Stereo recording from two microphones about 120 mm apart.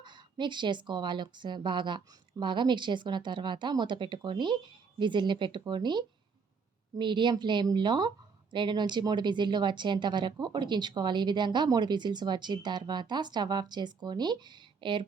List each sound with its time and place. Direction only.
0.0 s a woman's voice: 40° right (ahead or behind)